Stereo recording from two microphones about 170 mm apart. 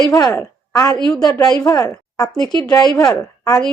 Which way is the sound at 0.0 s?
25° left (ahead or behind).